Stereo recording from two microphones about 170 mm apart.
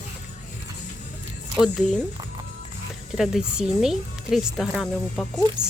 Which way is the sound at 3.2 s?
5° right (ahead or behind).